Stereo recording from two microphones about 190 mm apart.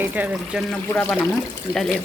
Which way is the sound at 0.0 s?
10° right (ahead or behind).